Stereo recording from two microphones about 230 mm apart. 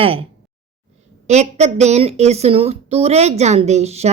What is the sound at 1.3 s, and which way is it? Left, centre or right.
A woman's voice, right.